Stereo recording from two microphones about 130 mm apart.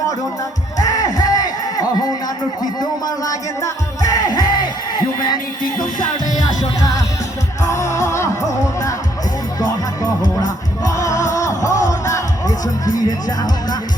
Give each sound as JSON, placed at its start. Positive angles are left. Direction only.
{"t": 0.8, "sound": "music", "side_deg": 25}
{"t": 3.2, "sound": "music", "side_deg": 25}
{"t": 10.4, "sound": "music", "side_deg": 25}
{"t": 13.1, "sound": "speech", "side_deg": 30}